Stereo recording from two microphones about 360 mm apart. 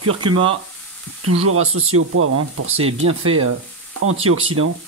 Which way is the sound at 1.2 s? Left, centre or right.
Right.